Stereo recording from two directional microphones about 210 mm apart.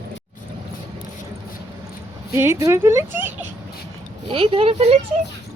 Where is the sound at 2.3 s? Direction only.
15° right (ahead or behind).